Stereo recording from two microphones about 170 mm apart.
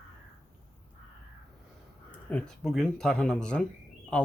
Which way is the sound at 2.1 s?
10° left (ahead or behind).